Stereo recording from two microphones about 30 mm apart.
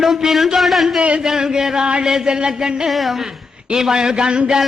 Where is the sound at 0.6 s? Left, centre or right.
Centre.